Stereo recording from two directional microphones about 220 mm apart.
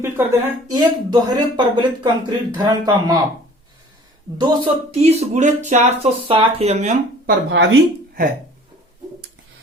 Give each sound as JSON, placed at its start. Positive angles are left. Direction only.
{"t": 0.0, "sound": "speech", "side_deg": -10}
{"t": 4.4, "sound": "speech", "side_deg": -20}
{"t": 7.5, "sound": "speech", "side_deg": -55}